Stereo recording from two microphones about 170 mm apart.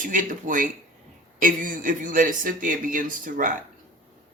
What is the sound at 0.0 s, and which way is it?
Speech, 50° right (ahead or behind).